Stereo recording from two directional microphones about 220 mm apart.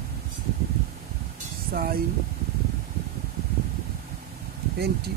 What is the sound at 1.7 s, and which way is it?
Speech, 45° right (ahead or behind).